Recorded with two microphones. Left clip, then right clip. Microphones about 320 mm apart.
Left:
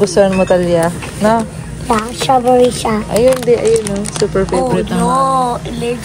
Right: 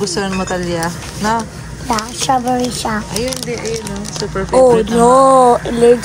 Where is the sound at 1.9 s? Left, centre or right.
Centre.